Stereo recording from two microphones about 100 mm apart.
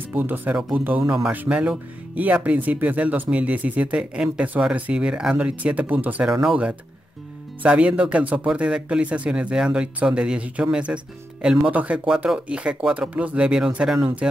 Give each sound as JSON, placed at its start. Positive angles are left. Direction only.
{"t": 0.1, "sound": "speech", "side_deg": -20}
{"t": 6.2, "sound": "speech", "side_deg": -5}